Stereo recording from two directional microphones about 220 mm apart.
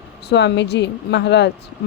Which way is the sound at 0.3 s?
50° left (ahead or behind).